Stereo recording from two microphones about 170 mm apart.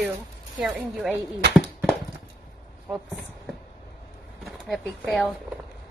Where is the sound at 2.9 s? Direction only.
5° right (ahead or behind).